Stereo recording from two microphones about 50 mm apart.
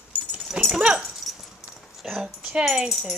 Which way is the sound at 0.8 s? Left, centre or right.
Centre.